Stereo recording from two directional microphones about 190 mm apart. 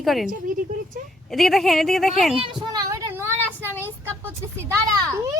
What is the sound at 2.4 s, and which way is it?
Child singing, 25° right (ahead or behind).